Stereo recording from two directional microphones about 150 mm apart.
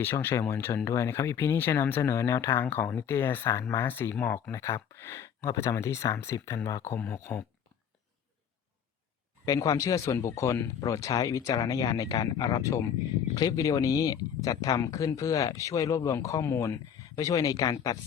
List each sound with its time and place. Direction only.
0.0 s speech: 15° left (ahead or behind)
9.5 s speech: 20° left (ahead or behind)